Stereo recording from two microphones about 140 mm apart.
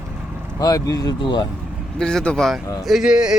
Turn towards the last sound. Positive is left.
turn(degrees=-5)  # may be behind; listen again after turning